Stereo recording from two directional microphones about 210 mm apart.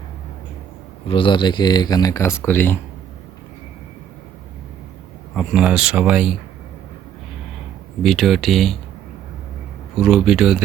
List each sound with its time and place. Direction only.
1.0 s speech: 25° left (ahead or behind)
5.3 s speech: 5° left (ahead or behind)
8.0 s speech: centre (ahead or behind)
9.9 s speech: centre (ahead or behind)